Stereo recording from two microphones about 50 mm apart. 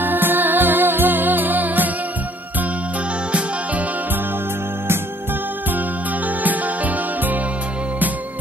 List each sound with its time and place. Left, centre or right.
0.0 s music: right
3.3 s music: right
6.4 s music: right